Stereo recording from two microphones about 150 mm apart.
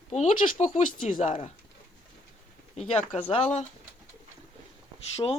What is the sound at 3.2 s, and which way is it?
Speech, 40° left (ahead or behind).